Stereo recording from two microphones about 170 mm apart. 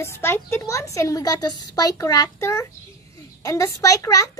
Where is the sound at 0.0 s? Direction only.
15° left (ahead or behind).